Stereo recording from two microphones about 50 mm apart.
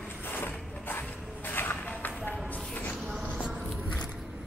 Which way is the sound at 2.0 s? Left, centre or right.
Left.